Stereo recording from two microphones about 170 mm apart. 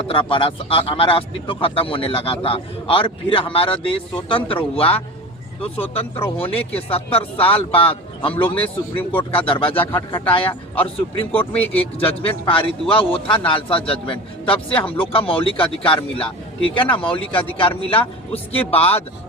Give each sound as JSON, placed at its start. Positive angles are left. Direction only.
{"t": 0.1, "sound": "a man's voice", "side_deg": 30}